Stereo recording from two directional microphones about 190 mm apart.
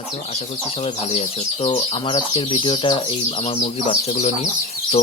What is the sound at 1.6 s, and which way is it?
Speech, 30° left (ahead or behind).